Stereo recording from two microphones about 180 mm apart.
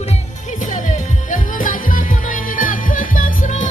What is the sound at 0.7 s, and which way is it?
Music, 45° left (ahead or behind).